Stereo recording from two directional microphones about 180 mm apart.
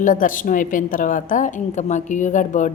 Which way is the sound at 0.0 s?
45° left (ahead or behind).